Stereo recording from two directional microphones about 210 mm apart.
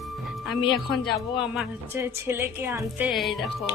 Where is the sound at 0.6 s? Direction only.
20° left (ahead or behind).